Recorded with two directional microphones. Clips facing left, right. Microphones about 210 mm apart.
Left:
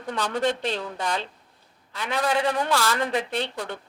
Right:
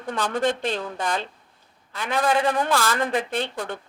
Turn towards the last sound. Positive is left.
turn(degrees=-50)  # may be behind; listen again after turning